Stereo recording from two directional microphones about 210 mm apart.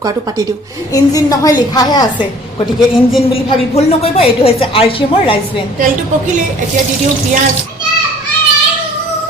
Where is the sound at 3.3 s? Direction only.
30° left (ahead or behind).